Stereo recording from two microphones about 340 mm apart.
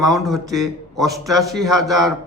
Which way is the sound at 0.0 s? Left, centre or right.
Centre.